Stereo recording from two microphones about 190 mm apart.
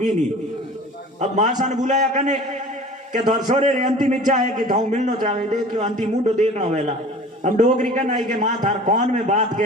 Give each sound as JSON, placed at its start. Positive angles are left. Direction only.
{"t": 1.2, "sound": "a man's voice", "side_deg": -40}